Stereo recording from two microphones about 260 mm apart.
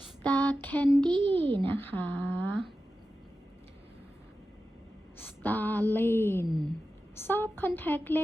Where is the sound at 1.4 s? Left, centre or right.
Right.